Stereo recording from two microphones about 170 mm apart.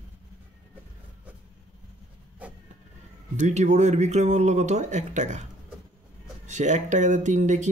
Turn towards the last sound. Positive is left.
turn(degrees=-45)  # may be behind; listen again after turning